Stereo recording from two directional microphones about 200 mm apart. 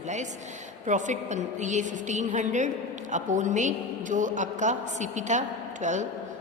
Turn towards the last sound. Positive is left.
turn(degrees=-35)  # may be behind; listen again after turning